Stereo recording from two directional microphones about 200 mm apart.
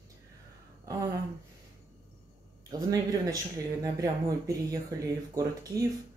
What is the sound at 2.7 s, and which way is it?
Speech, 20° right (ahead or behind).